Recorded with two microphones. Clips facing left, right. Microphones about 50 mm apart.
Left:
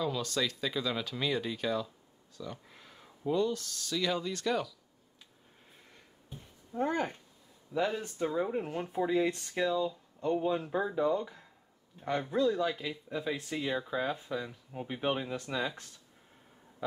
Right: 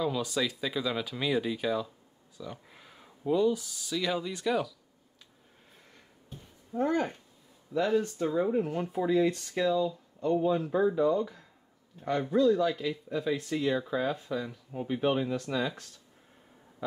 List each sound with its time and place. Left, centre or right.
0.0 s speech: centre
6.3 s a sound: centre
6.8 s speech: left
14.1 s speech: centre
14.4 s speech: centre